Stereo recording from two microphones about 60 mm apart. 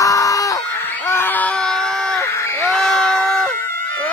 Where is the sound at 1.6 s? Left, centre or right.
Centre.